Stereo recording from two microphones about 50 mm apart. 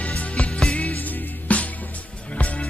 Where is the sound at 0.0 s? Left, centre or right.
Left.